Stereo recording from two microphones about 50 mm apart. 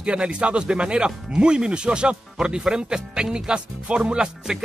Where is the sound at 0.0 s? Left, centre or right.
Right.